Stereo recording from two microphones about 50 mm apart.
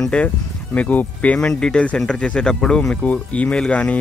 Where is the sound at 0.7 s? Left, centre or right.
Left.